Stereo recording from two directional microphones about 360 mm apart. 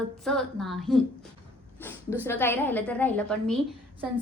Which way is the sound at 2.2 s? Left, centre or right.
Centre.